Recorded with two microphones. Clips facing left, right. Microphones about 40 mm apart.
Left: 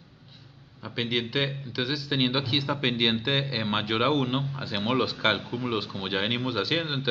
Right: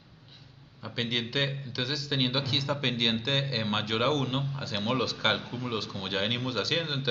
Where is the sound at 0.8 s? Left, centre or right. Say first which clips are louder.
Left 3 dB; centre.